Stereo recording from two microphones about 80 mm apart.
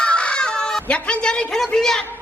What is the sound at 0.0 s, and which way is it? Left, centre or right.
Fowl, centre.